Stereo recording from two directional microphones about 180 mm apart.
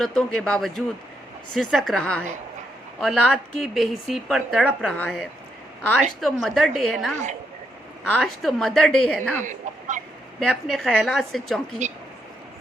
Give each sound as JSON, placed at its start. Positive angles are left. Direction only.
{"t": 0.0, "sound": "speech", "side_deg": 5}
{"t": 9.4, "sound": "speech", "side_deg": -45}
{"t": 10.4, "sound": "speech", "side_deg": 0}